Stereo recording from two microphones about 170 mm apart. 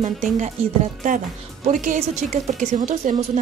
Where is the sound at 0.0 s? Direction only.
45° right (ahead or behind).